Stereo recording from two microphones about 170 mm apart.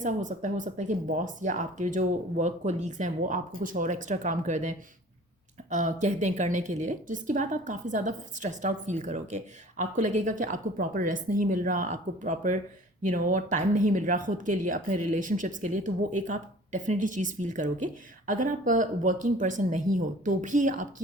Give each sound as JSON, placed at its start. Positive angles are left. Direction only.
{"t": 0.0, "sound": "speech", "side_deg": -45}
{"t": 5.7, "sound": "speech", "side_deg": -45}